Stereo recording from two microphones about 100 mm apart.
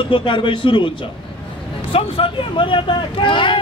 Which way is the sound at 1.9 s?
65° left (ahead or behind).